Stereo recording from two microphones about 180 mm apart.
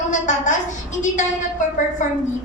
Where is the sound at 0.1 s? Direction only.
45° left (ahead or behind).